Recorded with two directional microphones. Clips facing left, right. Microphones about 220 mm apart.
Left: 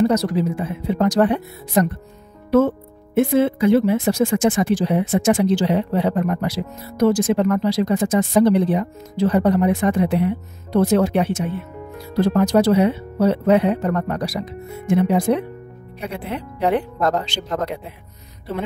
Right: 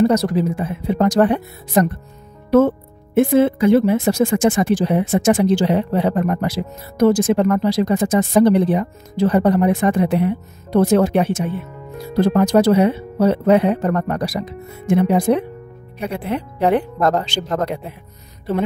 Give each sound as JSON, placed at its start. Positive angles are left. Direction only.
{"t": 0.1, "sound": "speech", "side_deg": -50}
{"t": 3.2, "sound": "speech", "side_deg": -50}